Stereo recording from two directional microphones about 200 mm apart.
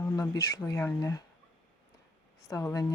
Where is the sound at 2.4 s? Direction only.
15° left (ahead or behind).